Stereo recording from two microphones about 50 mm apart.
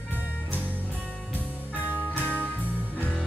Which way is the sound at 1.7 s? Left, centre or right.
Right.